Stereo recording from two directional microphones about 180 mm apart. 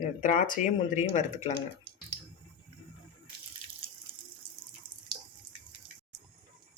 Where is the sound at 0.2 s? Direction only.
45° left (ahead or behind).